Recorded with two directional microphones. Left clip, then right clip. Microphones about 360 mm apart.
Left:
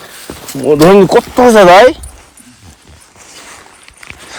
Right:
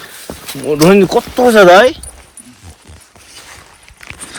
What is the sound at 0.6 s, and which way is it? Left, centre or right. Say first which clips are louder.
Speech: left 4 dB; left.